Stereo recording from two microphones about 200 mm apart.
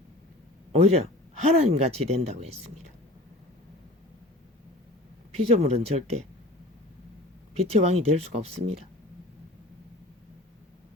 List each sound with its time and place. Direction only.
0.7 s speech: 30° right (ahead or behind)
5.3 s speech: 30° right (ahead or behind)
7.5 s speech: 30° right (ahead or behind)